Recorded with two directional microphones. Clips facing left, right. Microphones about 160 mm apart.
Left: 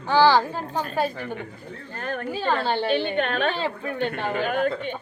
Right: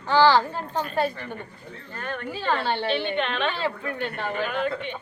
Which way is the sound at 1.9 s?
45° left (ahead or behind).